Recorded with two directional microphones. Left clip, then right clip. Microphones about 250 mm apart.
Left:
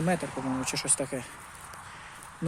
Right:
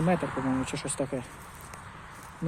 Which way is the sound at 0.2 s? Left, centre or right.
Left.